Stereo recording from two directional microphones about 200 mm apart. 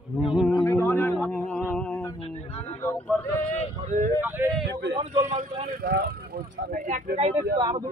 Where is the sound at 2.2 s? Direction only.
30° left (ahead or behind).